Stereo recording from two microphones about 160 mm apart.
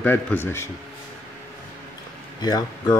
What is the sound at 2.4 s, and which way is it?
Speech, 25° left (ahead or behind).